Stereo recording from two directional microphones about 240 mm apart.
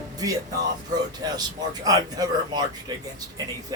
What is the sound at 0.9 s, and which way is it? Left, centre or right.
Speech, centre.